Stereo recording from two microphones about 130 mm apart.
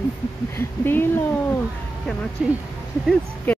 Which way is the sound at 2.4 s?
5° right (ahead or behind).